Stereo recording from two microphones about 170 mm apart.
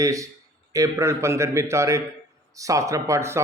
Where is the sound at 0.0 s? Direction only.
20° right (ahead or behind).